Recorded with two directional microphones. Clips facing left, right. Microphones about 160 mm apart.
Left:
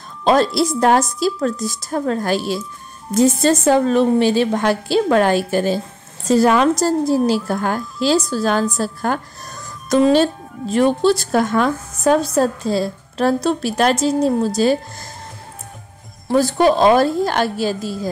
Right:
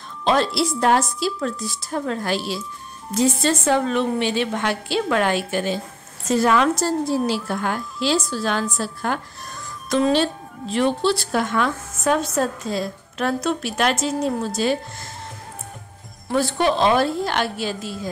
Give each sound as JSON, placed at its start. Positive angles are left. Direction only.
{"t": 0.2, "sound": "a woman's voice", "side_deg": 40}
{"t": 16.3, "sound": "a woman's voice", "side_deg": 40}